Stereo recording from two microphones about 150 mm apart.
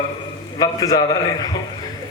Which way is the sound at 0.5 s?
25° left (ahead or behind).